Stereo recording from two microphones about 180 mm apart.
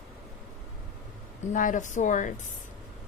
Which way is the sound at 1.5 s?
45° left (ahead or behind).